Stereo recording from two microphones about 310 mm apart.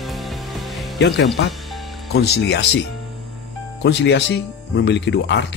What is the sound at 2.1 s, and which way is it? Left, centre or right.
Speech, left.